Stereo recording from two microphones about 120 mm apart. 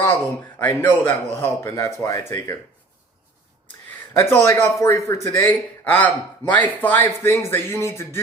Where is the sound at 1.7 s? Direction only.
25° left (ahead or behind).